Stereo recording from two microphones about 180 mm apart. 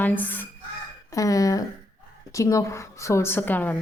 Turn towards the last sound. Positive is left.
turn(degrees=10)  # may be behind; listen again after turning